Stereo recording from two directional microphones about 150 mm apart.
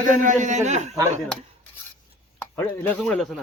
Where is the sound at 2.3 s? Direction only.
15° left (ahead or behind).